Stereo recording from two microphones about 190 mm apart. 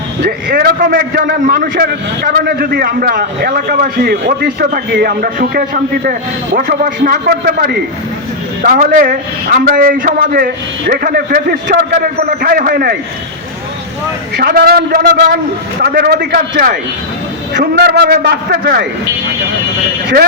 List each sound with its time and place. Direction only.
0.3 s a man's voice: 50° right (ahead or behind)
14.3 s a man's voice: 55° right (ahead or behind)